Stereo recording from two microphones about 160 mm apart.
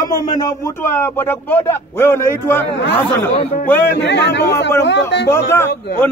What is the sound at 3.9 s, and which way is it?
Speech, 90° left.